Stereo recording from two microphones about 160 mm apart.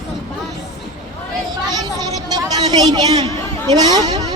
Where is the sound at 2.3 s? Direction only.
25° right (ahead or behind).